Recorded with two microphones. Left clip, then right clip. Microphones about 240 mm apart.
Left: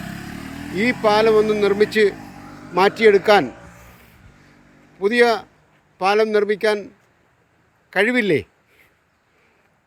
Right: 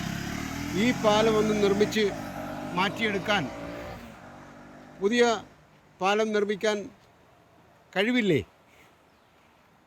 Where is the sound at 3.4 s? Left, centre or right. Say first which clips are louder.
Left 1 dB; right.